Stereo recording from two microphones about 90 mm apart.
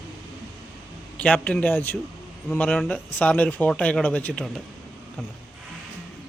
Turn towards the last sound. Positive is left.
turn(degrees=15)  # may be behind; listen again after turning